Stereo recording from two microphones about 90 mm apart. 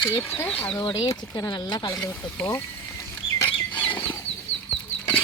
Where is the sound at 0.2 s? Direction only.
20° left (ahead or behind).